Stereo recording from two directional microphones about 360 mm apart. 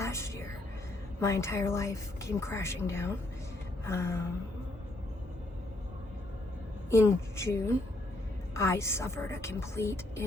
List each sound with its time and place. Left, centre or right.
0.0 s music: centre
1.2 s a woman's voice: centre
6.9 s a woman's voice: centre